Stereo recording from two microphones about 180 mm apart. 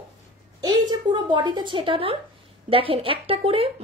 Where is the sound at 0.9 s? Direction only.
25° right (ahead or behind).